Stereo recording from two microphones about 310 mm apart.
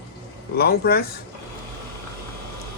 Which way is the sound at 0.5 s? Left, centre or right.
Left.